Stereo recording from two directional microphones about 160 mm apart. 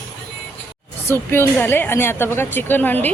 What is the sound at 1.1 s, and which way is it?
A woman's voice, 15° left (ahead or behind).